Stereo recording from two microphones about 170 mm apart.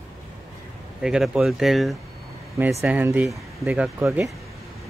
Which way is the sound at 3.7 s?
15° right (ahead or behind).